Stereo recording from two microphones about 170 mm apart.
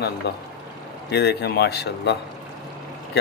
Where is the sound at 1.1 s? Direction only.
75° left (ahead or behind).